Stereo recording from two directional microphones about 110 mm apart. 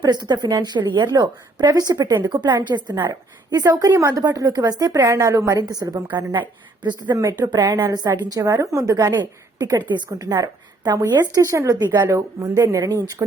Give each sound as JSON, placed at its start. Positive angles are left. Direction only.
{"t": 0.0, "sound": "a woman's voice", "side_deg": -40}
{"t": 9.6, "sound": "a woman's voice", "side_deg": -35}